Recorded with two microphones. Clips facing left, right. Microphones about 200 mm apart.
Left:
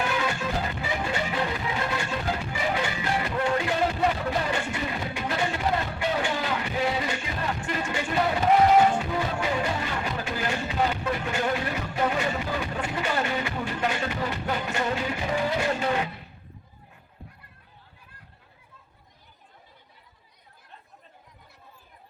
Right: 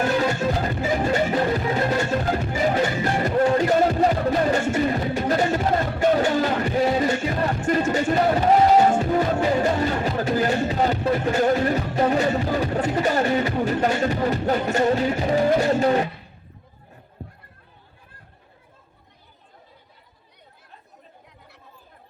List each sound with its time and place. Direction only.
0.0 s music: 40° right (ahead or behind)
17.2 s neigh: 35° right (ahead or behind)